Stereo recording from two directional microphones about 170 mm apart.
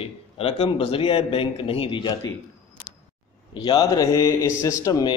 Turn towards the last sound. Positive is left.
turn(degrees=20)  # may be behind; listen again after turning